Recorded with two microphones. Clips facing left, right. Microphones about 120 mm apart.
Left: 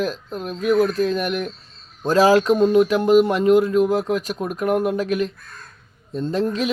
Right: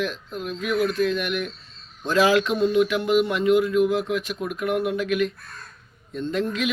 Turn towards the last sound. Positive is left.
turn(degrees=35)  # may be behind; listen again after turning